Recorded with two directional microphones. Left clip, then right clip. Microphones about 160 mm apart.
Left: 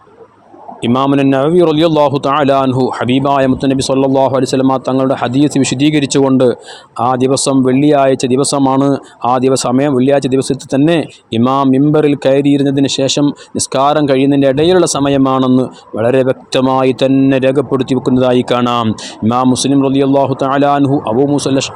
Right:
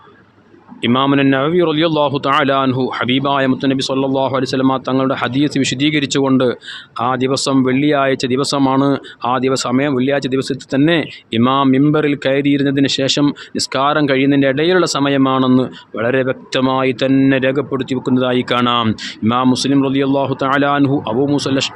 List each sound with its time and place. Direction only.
0.8 s speech: 25° left (ahead or behind)
8.6 s speech: 10° left (ahead or behind)
9.2 s speech: 30° left (ahead or behind)